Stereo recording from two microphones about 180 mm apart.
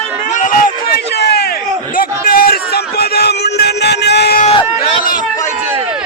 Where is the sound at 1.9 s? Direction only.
55° left (ahead or behind).